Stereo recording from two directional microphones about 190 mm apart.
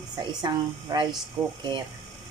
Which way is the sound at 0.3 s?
20° right (ahead or behind).